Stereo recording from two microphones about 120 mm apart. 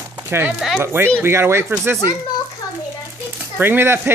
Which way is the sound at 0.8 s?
20° right (ahead or behind).